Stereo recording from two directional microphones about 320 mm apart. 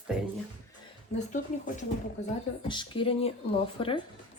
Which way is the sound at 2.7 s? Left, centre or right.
Centre.